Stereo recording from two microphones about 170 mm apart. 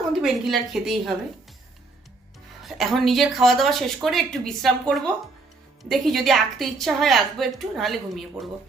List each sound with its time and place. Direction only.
0.1 s a woman's voice: centre (ahead or behind)
2.6 s a woman's voice: centre (ahead or behind)